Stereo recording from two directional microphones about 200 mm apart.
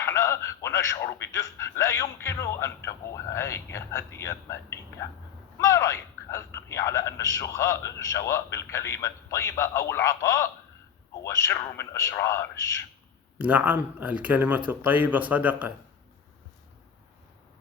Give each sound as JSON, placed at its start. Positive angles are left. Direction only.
{"t": 0.0, "sound": "a man's voice", "side_deg": 15}
{"t": 13.4, "sound": "speech", "side_deg": -5}